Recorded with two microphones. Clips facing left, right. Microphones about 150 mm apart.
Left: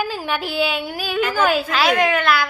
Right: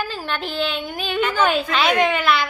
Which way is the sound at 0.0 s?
10° left (ahead or behind).